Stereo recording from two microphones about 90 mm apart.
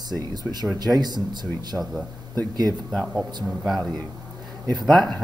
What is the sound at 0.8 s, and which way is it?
Speech, 50° right (ahead or behind).